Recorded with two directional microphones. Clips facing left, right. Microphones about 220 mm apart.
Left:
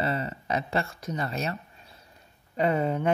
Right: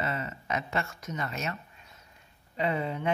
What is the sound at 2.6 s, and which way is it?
Speech, 45° left (ahead or behind).